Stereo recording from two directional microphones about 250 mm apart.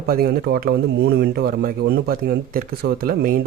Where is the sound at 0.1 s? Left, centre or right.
Right.